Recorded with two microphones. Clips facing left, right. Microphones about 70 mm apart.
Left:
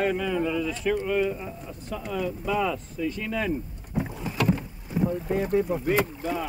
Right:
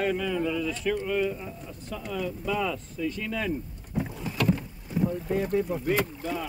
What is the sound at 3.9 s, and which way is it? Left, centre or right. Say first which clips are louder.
Boat: left 2 dB; centre.